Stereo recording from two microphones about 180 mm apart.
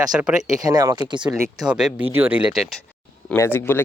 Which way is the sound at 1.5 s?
5° right (ahead or behind).